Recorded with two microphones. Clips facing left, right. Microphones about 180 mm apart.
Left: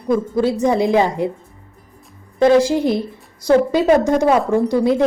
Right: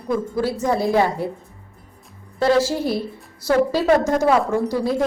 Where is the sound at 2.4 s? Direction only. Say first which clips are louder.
Left 5 dB; 15° left (ahead or behind).